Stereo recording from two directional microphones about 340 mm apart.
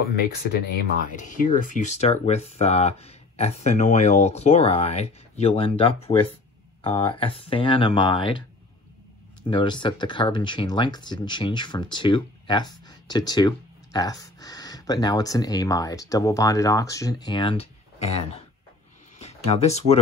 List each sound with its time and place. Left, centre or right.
1.1 s speech: left
9.5 s speech: centre